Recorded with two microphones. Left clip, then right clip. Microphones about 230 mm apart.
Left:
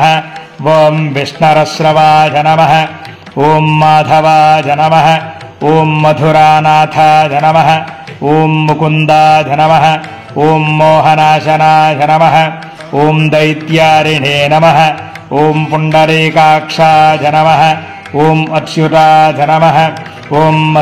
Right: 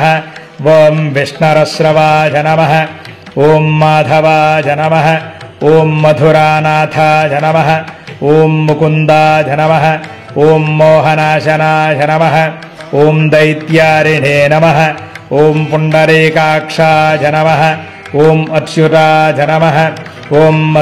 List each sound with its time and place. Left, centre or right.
0.7 s mantra: centre